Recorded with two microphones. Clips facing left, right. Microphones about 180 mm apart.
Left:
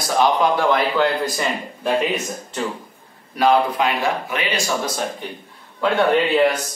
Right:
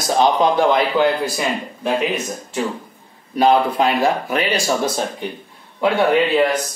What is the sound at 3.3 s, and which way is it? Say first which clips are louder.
Speech: right 2 dB; 30° right (ahead or behind).